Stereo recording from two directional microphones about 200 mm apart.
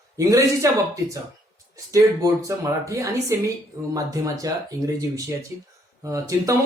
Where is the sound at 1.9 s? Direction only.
15° right (ahead or behind).